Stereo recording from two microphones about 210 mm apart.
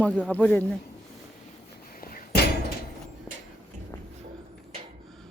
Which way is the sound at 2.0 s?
40° left (ahead or behind).